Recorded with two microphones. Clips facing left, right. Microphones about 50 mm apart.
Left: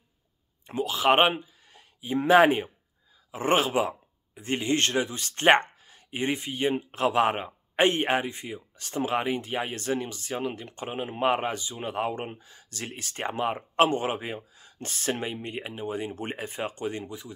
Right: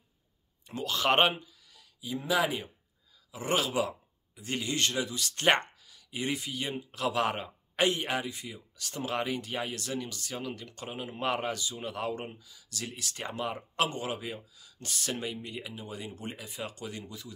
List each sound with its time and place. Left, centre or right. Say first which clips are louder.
0.8 s speech: left 4 dB; centre
1.3 s a sound: left 6 dB; left
2.1 s speech: left 10 dB; left
12.3 s speech: left 5 dB; left